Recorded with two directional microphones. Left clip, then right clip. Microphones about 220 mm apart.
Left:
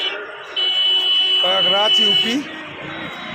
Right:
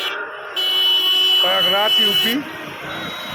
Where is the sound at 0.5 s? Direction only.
45° right (ahead or behind).